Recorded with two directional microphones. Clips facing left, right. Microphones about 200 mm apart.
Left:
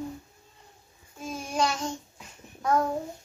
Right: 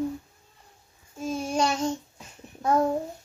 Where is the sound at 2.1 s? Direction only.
25° right (ahead or behind).